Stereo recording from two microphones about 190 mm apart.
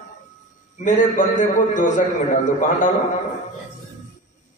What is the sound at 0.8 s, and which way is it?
A man's voice, 40° left (ahead or behind).